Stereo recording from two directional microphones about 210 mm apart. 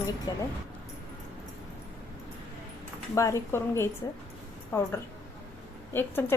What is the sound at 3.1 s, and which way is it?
Speech, 15° left (ahead or behind).